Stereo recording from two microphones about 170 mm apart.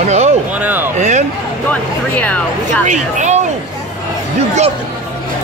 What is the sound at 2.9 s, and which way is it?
Speech, 45° right (ahead or behind).